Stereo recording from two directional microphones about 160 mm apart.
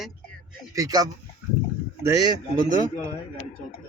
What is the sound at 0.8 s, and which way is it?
Speech, 25° right (ahead or behind).